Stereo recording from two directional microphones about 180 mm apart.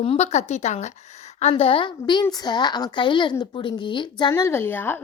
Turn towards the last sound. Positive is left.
turn(degrees=10)  # may be behind; listen again after turning